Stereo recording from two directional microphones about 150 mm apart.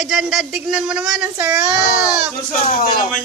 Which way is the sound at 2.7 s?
70° left (ahead or behind).